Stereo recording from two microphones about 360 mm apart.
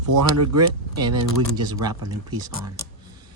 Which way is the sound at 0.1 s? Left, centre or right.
Right.